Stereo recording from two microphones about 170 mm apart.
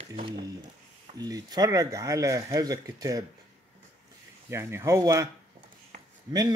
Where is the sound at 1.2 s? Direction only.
20° right (ahead or behind).